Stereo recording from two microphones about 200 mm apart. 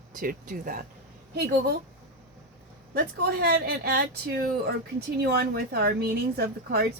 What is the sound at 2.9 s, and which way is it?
Speech, 50° right (ahead or behind).